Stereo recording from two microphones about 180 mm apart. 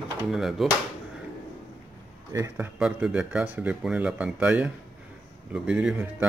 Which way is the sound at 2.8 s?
5° right (ahead or behind).